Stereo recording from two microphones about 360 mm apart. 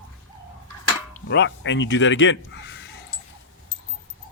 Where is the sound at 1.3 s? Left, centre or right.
Left.